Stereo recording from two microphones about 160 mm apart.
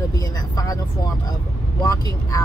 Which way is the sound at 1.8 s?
20° left (ahead or behind).